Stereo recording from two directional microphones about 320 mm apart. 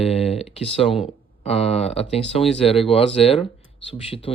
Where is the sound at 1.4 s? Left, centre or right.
Centre.